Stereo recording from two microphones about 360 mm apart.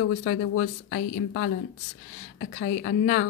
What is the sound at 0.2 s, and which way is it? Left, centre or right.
Speech, left.